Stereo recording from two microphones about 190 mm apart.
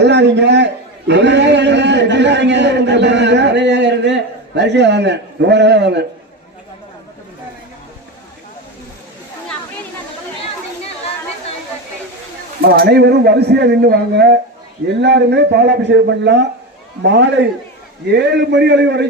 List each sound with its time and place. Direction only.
0.0 s a man's voice: 65° right (ahead or behind)
12.6 s speech: 55° right (ahead or behind)